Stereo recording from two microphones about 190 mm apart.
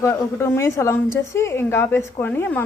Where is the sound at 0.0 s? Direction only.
15° left (ahead or behind).